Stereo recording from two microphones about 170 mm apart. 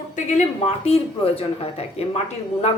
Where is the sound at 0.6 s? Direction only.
35° left (ahead or behind).